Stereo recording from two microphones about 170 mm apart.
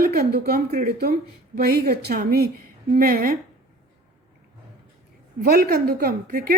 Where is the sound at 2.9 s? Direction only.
55° right (ahead or behind).